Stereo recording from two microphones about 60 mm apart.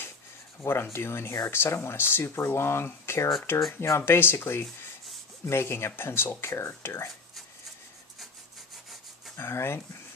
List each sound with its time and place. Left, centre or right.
0.6 s speech: left
9.4 s speech: left